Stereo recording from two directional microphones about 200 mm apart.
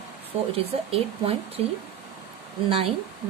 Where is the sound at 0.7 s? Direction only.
30° right (ahead or behind).